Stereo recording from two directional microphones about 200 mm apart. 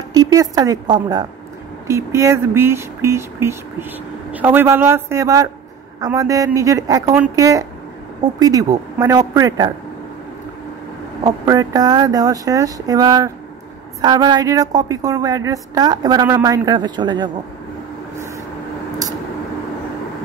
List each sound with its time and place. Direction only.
0.1 s a woman's voice: 20° right (ahead or behind)
11.4 s a woman's voice: 20° right (ahead or behind)